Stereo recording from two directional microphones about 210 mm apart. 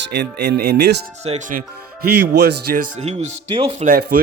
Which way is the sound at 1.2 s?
35° right (ahead or behind).